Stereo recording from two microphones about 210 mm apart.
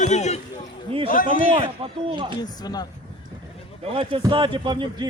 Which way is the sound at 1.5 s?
25° right (ahead or behind).